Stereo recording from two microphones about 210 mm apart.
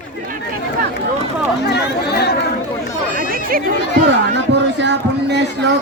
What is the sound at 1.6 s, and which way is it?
Chatter, 50° left (ahead or behind).